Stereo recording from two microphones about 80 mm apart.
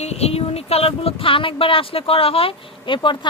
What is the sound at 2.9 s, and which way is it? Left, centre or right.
Speech, left.